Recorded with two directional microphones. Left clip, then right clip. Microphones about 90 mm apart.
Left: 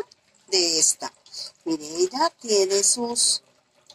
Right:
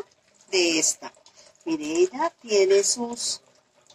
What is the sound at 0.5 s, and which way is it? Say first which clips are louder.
Speech: left 1 dB; 35° right (ahead or behind).